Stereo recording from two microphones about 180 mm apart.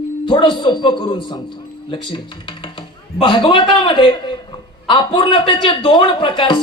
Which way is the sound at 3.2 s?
25° left (ahead or behind).